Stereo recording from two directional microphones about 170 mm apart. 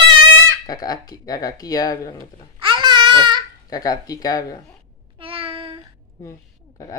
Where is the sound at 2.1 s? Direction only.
30° right (ahead or behind).